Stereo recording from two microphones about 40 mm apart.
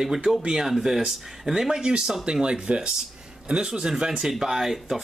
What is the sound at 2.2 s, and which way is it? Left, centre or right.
Speech, right.